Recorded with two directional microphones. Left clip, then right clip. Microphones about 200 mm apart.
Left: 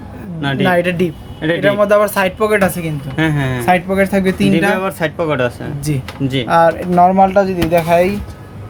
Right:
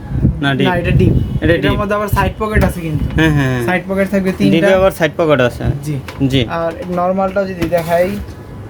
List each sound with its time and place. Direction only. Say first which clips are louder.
0.6 s speech: left 5 dB; 40° left (ahead or behind)
1.4 s speech: right 3 dB; 10° right (ahead or behind)
1.6 s speech: left 5 dB; 40° left (ahead or behind)
3.2 s speech: right 3 dB; 10° right (ahead or behind)
3.7 s speech: left 6 dB; 35° left (ahead or behind)
4.7 s speech: right 6 dB; 20° right (ahead or behind)
6.5 s speech: left 7 dB; 45° left (ahead or behind)